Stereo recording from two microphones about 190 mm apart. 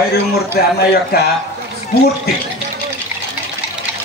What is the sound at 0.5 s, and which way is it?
Speech, 55° left (ahead or behind).